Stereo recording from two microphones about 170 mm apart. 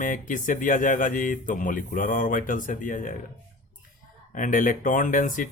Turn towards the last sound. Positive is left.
turn(degrees=50)  # may be behind; listen again after turning